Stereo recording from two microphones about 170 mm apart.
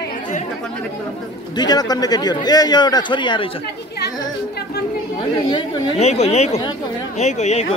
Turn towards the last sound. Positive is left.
turn(degrees=40)  # may be behind; listen again after turning